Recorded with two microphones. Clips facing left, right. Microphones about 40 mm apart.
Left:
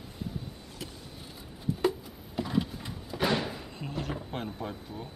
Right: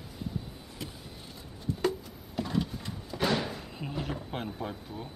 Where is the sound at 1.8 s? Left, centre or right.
Centre.